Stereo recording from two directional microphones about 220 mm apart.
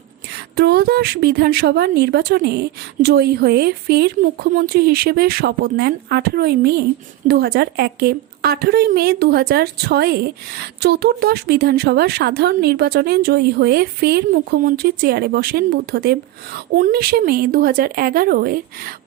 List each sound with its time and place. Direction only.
0.5 s a woman's voice: 45° right (ahead or behind)